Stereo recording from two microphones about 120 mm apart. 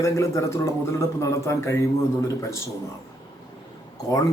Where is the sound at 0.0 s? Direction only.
25° left (ahead or behind).